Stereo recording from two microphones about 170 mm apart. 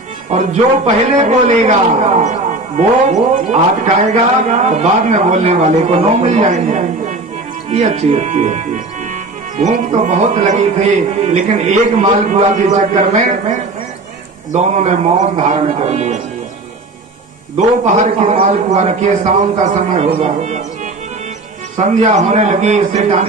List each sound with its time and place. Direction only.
0.3 s a man's voice: 40° right (ahead or behind)
17.6 s a man's voice: 45° right (ahead or behind)
21.8 s a man's voice: 45° right (ahead or behind)